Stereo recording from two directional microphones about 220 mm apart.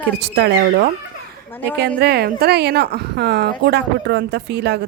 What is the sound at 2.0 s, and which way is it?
Speech, 45° right (ahead or behind).